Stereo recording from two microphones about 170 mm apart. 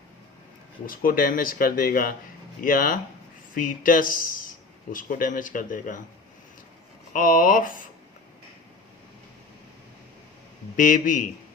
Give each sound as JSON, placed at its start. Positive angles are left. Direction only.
{"t": 0.9, "sound": "a man's voice", "side_deg": 55}
{"t": 7.1, "sound": "speech", "side_deg": 55}
{"t": 10.8, "sound": "a man's voice", "side_deg": 50}